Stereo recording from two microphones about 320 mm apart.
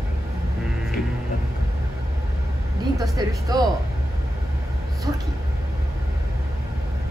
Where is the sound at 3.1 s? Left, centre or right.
Centre.